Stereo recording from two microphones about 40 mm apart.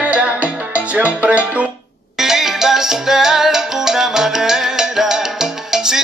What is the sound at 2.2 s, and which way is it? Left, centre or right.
Salsa music, centre.